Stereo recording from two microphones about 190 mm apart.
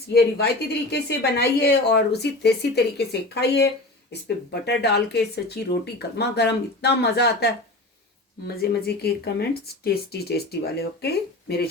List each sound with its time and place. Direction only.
0.1 s speech: 60° left (ahead or behind)